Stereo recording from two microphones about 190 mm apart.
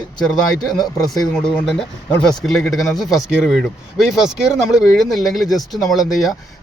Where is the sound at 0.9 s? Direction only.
20° left (ahead or behind).